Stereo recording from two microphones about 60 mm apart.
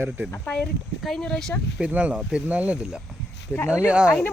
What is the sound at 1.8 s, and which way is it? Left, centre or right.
Speech, right.